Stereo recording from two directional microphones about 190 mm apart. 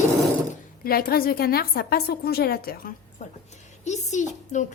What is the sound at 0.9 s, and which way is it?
A woman's voice, 50° left (ahead or behind).